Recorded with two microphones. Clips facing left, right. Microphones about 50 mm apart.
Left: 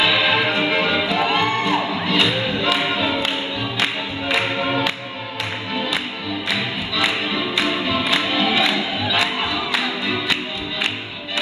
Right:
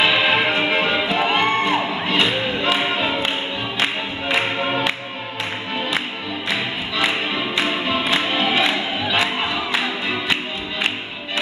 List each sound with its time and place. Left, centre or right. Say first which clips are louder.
0.0 s music: right 1 dB; centre